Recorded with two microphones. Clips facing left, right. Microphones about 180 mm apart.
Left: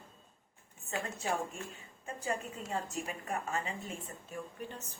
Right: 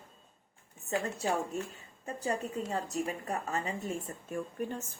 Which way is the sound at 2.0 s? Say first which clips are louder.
Right 3 dB; 35° right (ahead or behind).